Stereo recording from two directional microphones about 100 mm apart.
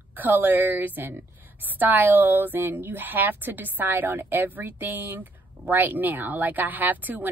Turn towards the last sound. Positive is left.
turn(degrees=-15)  # may be behind; listen again after turning